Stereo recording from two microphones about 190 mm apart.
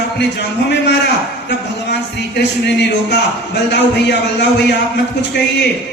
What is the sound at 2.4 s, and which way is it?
A man's voice, 65° left (ahead or behind).